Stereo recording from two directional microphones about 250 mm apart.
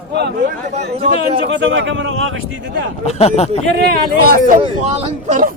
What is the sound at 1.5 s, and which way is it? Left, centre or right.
Speech, right.